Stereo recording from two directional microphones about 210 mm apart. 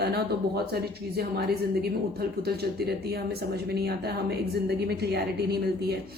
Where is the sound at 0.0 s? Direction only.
50° right (ahead or behind).